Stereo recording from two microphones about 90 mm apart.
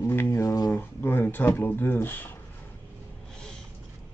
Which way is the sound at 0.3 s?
35° left (ahead or behind).